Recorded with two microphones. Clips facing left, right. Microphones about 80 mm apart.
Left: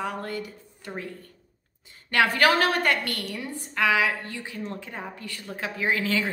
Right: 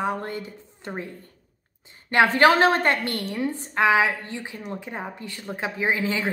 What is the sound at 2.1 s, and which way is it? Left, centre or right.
A woman's voice, right.